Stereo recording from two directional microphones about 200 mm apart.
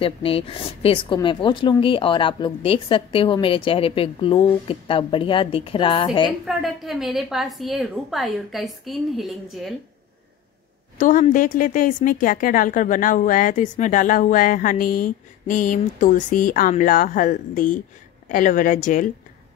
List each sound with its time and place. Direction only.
0.0 s a woman's voice: 25° left (ahead or behind)
6.4 s a woman's voice: centre (ahead or behind)
11.0 s a woman's voice: 40° left (ahead or behind)